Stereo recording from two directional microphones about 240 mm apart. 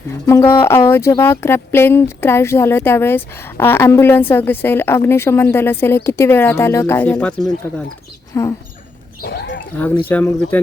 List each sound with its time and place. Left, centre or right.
0.3 s speech: centre
8.3 s a sound: centre
9.2 s speech: left
9.7 s speech: centre